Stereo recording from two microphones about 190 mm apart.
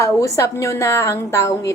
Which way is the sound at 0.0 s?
15° left (ahead or behind).